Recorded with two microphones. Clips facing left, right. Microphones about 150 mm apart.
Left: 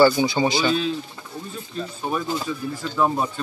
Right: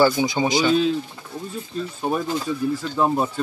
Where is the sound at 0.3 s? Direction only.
15° right (ahead or behind).